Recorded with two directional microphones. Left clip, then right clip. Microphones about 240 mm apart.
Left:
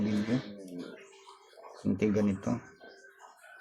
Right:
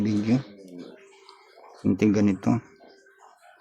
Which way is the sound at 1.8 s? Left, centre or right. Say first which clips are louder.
Right 7 dB; right.